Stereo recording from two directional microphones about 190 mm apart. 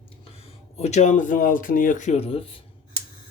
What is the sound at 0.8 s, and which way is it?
Speech, 35° left (ahead or behind).